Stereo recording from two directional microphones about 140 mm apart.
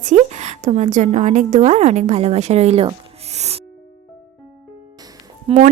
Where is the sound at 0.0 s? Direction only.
60° right (ahead or behind).